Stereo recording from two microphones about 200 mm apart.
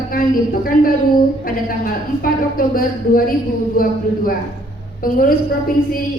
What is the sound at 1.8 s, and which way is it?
A woman's voice, 45° left (ahead or behind).